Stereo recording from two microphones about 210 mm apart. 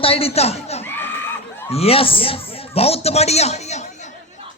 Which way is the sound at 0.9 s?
10° left (ahead or behind).